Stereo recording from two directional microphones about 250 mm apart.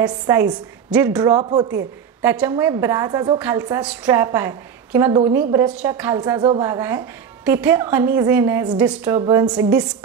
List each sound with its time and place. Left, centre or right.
0.0 s speech: centre
1.2 s a woman's voice: centre